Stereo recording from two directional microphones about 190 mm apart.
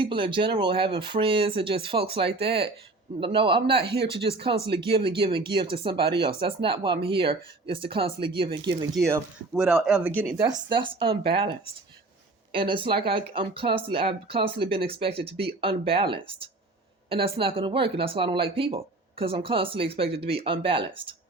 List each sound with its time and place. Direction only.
0.0 s a man's voice: 25° right (ahead or behind)
9.5 s speech: 5° right (ahead or behind)
10.4 s a man's voice: 25° right (ahead or behind)